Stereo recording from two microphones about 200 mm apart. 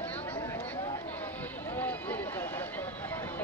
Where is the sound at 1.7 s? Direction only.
10° left (ahead or behind).